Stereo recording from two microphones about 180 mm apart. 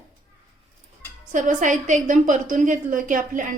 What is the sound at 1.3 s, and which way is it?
A woman's voice, 45° right (ahead or behind).